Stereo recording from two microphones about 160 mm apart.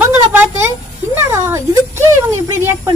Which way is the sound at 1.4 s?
15° right (ahead or behind).